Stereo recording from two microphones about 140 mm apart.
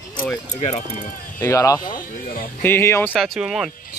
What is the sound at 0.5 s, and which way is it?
Speech, 60° left (ahead or behind).